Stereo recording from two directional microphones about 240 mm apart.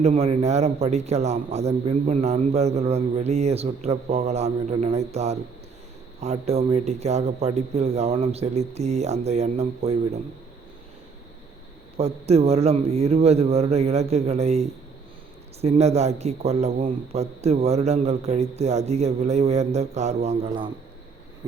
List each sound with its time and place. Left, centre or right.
0.0 s a man's voice: right
11.9 s a man's voice: right